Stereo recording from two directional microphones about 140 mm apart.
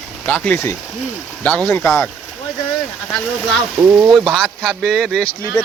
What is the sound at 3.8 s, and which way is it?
Speech, 10° right (ahead or behind).